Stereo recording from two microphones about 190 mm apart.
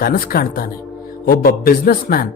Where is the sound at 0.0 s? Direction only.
50° left (ahead or behind).